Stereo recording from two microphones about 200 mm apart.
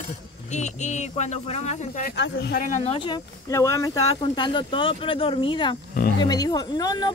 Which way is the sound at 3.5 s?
15° left (ahead or behind).